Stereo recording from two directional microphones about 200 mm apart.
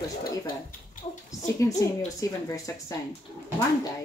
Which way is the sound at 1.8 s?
15° left (ahead or behind).